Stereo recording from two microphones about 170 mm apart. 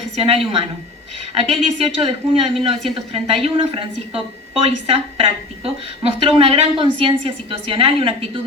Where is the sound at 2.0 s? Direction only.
35° right (ahead or behind).